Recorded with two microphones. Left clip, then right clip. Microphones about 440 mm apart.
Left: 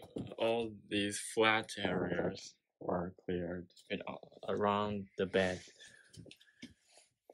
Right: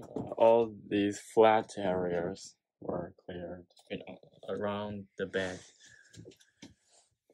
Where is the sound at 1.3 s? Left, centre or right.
Centre.